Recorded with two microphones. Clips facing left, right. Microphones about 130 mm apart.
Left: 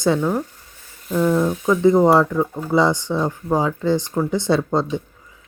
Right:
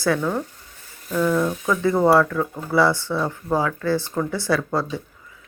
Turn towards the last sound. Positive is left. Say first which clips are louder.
# left 4 dB
turn(degrees=25)  # may be behind; listen again after turning